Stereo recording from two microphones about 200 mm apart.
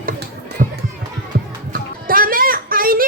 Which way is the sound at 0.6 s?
40° right (ahead or behind).